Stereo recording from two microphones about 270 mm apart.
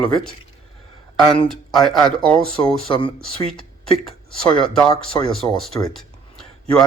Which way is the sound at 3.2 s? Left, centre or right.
Centre.